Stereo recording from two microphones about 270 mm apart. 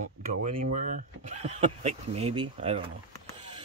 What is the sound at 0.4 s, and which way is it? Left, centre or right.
Speech, right.